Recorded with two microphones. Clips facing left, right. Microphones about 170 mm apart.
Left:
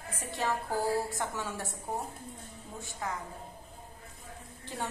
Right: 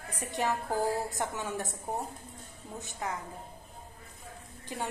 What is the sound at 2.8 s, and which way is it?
Speech, 20° right (ahead or behind).